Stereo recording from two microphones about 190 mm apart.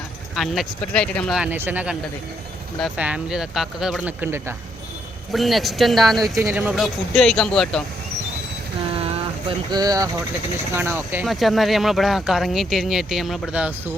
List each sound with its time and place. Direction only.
0.3 s speech: centre (ahead or behind)
3.0 s speech: 5° right (ahead or behind)
5.3 s speech: centre (ahead or behind)
6.4 s speech: 10° right (ahead or behind)
6.7 s speech: centre (ahead or behind)
9.0 s boat: 30° right (ahead or behind)
10.7 s speech: 10° right (ahead or behind)
11.3 s speech: centre (ahead or behind)